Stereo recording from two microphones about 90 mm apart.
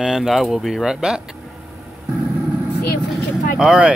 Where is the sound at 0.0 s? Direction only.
5° right (ahead or behind).